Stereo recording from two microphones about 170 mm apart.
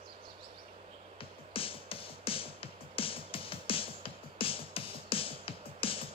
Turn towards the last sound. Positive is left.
turn(degrees=35)  # may be behind; listen again after turning